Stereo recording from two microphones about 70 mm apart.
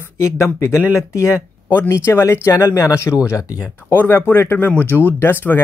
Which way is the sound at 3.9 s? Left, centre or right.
Left.